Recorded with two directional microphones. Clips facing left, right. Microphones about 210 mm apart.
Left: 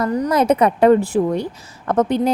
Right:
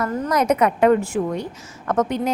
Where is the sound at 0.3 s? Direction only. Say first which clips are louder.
Left 2 dB; 30° left (ahead or behind).